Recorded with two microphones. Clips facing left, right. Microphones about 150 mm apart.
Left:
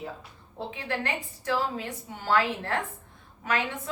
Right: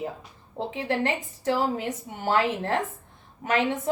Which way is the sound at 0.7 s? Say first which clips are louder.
Right 6 dB; 20° right (ahead or behind).